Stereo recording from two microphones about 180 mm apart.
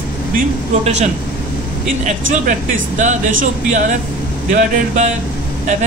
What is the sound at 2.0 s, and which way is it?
Speech, 45° right (ahead or behind).